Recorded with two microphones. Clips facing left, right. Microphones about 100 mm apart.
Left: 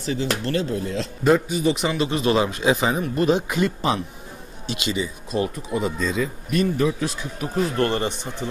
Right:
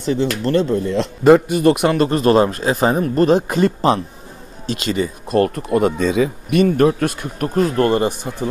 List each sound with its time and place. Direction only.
0.4 s speech: 45° right (ahead or behind)
7.7 s speech: 45° right (ahead or behind)
8.1 s speech: 10° right (ahead or behind)